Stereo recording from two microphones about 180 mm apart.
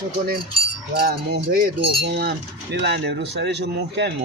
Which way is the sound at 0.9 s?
60° right (ahead or behind).